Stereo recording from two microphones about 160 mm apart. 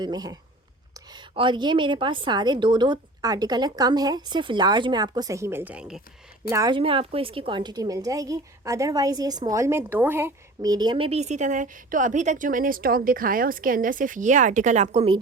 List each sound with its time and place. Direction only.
0.0 s a woman's voice: 25° right (ahead or behind); by 6.0 s 10° right (ahead or behind)
6.5 s a woman's voice: 20° right (ahead or behind)
6.7 s a woman's voice: 35° right (ahead or behind)